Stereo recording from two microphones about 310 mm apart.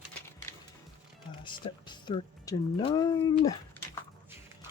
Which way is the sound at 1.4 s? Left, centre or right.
Centre.